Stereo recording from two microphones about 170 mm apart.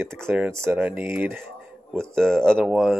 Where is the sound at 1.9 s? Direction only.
5° left (ahead or behind).